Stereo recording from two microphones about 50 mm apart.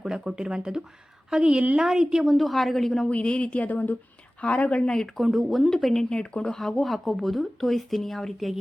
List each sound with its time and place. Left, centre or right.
0.0 s speech: centre
2.2 s speech: centre
3.1 s speech: left
4.4 s speech: left
4.9 s speech: centre
6.6 s speech: centre